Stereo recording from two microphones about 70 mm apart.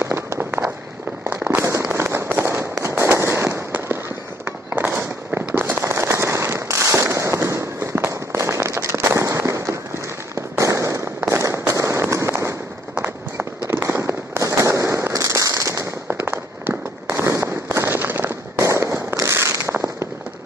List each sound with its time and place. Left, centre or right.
0.0 s run: right
1.2 s a sound: right
1.6 s fireworks: right
8.1 s firecracker: right
10.6 s fireworks: right
11.1 s firecracker: right
13.7 s fireworks: right
16.2 s firecracker: right
17.3 s firecracker: right
17.6 s fireworks: right
18.6 s fireworks: right